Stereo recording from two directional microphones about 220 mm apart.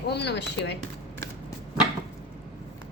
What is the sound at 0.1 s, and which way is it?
Speech, 50° left (ahead or behind).